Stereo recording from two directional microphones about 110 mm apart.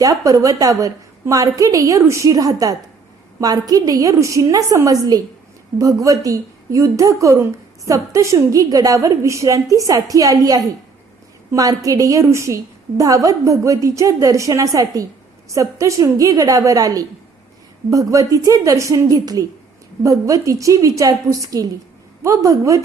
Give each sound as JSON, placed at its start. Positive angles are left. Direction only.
{"t": 0.0, "sound": "a woman's voice", "side_deg": -30}